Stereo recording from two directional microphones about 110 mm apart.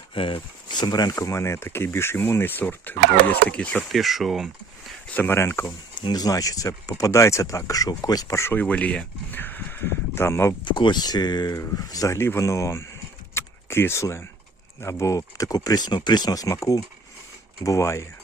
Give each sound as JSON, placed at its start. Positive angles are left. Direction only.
{"t": 0.1, "sound": "speech", "side_deg": 50}
{"t": 3.8, "sound": "speech", "side_deg": 0}
{"t": 5.0, "sound": "speech", "side_deg": 15}
{"t": 6.0, "sound": "speech", "side_deg": 35}
{"t": 8.6, "sound": "speech", "side_deg": 10}
{"t": 10.7, "sound": "speech", "side_deg": 45}
{"t": 13.3, "sound": "keys jangling", "side_deg": 25}
{"t": 14.8, "sound": "speech", "side_deg": 25}